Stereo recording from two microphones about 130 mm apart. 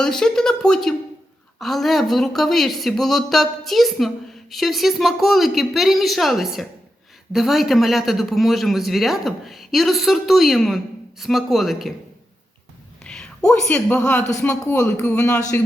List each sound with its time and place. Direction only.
0.0 s speech: 5° left (ahead or behind)
13.1 s a sound: 5° left (ahead or behind)
13.5 s speech: 10° left (ahead or behind)
14.7 s speech: 25° left (ahead or behind)